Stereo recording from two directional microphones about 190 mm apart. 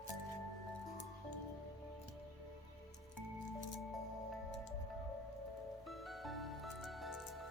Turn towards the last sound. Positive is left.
turn(degrees=0)  # may be behind; listen again after turning